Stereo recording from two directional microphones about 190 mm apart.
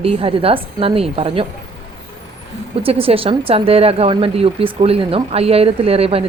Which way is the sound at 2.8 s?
30° right (ahead or behind).